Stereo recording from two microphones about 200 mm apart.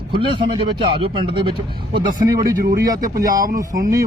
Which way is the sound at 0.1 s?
25° right (ahead or behind).